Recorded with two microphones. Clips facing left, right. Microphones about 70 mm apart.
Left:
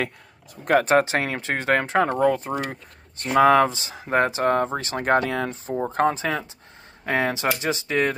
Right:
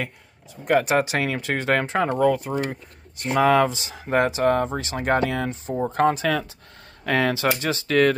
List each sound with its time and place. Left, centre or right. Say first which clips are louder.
0.7 s speech: left 2 dB; left; by 8.2 s centre